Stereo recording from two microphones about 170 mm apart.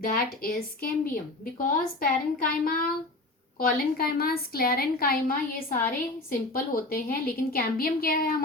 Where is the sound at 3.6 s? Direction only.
60° left (ahead or behind).